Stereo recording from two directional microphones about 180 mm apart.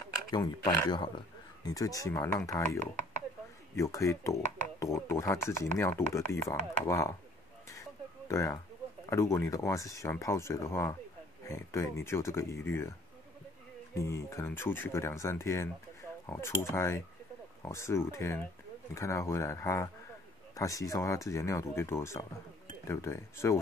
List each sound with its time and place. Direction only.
0.3 s speech: 25° left (ahead or behind)
8.3 s speech: 15° left (ahead or behind)
13.9 s speech: 15° left (ahead or behind)